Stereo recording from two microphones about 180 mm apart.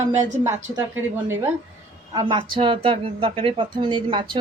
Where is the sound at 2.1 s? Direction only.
25° right (ahead or behind).